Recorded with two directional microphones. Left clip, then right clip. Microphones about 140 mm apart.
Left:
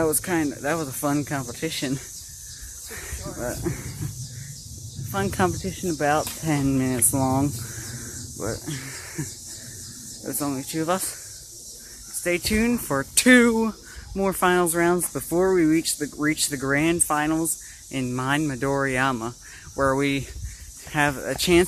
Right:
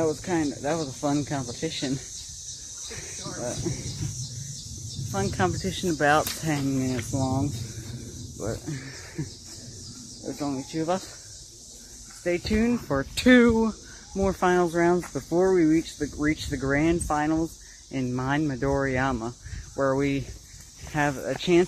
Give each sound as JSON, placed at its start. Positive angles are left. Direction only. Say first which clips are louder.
{"t": 0.0, "sound": "speech", "louder": "left 3 dB", "side_deg": 25}
{"t": 0.3, "sound": "speech", "louder": "left 2 dB", "side_deg": 10}
{"t": 3.7, "sound": "speech", "louder": "left 3 dB", "side_deg": 10}
{"t": 5.1, "sound": "speech", "louder": "left 3 dB", "side_deg": 10}
{"t": 6.5, "sound": "speech", "louder": "left 4 dB", "side_deg": 40}
{"t": 8.4, "sound": "speech", "louder": "left 2 dB", "side_deg": 15}
{"t": 12.2, "sound": "speech", "louder": "left 3 dB", "side_deg": 15}